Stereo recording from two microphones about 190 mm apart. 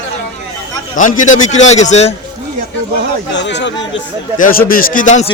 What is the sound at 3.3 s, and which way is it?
Speech, 65° left (ahead or behind).